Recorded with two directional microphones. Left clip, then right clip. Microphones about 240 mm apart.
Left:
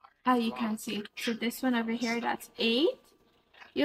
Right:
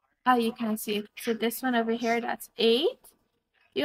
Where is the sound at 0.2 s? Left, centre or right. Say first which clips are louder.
Right 4 dB; right.